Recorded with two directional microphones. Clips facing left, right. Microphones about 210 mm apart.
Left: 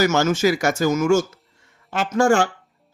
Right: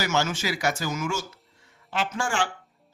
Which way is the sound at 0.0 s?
45° left (ahead or behind).